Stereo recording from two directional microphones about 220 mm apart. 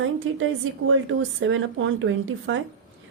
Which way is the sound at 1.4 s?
60° right (ahead or behind).